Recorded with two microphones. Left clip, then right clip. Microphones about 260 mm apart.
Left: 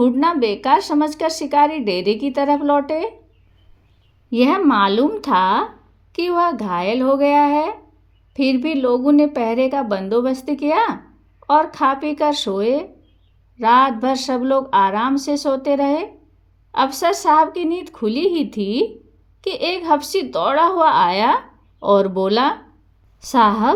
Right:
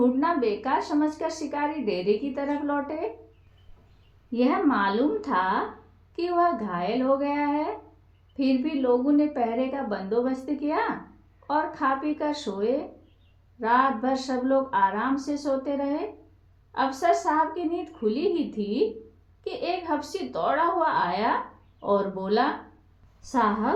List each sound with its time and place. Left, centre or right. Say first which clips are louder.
0.0 s a woman's voice: left 7 dB; left
4.3 s a woman's voice: left 8 dB; left